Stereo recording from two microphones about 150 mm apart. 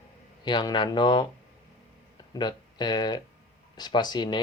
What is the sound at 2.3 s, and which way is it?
Speech, 30° left (ahead or behind).